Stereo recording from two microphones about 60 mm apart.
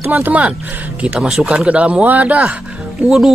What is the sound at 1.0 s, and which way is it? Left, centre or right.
Speech, centre.